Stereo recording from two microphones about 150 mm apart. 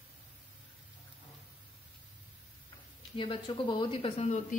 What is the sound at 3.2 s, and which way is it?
Speech, 35° left (ahead or behind).